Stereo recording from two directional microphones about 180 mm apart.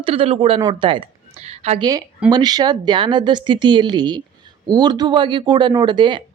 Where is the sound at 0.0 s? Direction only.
30° right (ahead or behind).